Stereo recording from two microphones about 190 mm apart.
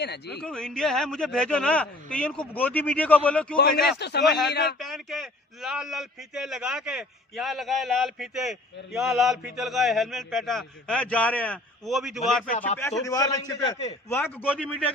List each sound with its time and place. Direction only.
0.0 s speech: 60° left (ahead or behind)
0.4 s a man's voice: 5° left (ahead or behind)
3.5 s a man's voice: 50° left (ahead or behind)
3.8 s speech: 60° left (ahead or behind)
4.8 s a man's voice: centre (ahead or behind)
13.0 s a man's voice: 20° left (ahead or behind)
14.5 s a man's voice: 5° left (ahead or behind)